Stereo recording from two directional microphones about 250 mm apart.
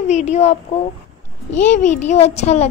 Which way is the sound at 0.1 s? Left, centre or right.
Left.